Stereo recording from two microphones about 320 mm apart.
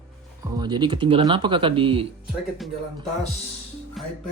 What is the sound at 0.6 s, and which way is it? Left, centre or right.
Speech, centre.